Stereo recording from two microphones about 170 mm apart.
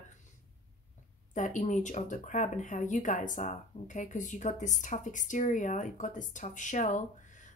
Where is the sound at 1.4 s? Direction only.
50° left (ahead or behind).